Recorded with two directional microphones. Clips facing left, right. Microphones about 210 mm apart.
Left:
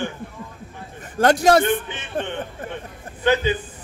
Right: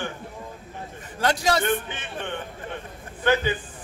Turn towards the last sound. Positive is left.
turn(degrees=20)  # may be behind; listen again after turning